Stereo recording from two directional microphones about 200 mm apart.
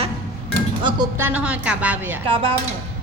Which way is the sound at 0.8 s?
25° right (ahead or behind).